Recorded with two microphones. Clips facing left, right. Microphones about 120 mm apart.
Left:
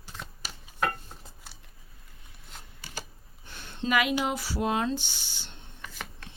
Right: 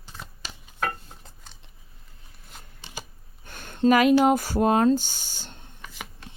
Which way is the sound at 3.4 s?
50° right (ahead or behind).